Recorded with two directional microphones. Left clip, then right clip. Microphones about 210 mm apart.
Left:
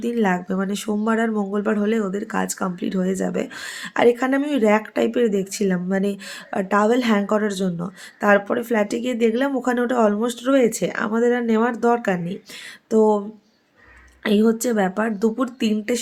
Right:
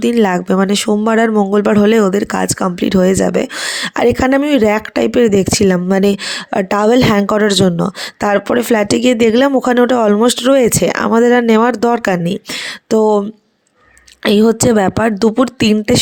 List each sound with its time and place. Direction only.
0.0 s speech: 45° right (ahead or behind)
14.3 s speech: 45° right (ahead or behind)